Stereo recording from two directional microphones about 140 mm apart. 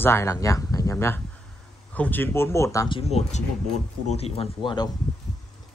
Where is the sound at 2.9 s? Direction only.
45° left (ahead or behind).